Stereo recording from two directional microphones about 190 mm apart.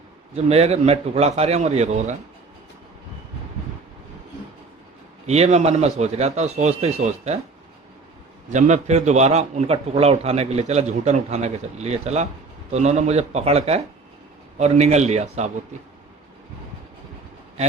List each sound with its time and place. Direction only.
0.3 s a man's voice: 35° right (ahead or behind)
5.2 s a man's voice: 35° right (ahead or behind)
8.5 s a man's voice: 40° right (ahead or behind)